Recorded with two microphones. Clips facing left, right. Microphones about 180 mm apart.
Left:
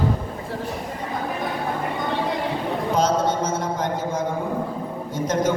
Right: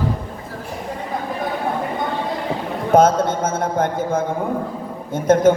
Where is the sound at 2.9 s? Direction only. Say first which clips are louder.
Right 8 dB; 50° right (ahead or behind).